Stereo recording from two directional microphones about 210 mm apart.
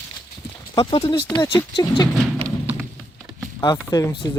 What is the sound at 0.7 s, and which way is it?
Speech, 25° left (ahead or behind).